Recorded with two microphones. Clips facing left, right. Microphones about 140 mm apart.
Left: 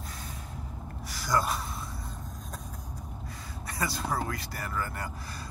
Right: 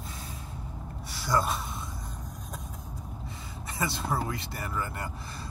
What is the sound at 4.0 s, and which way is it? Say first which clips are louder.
Speech: right 1 dB; centre (ahead or behind).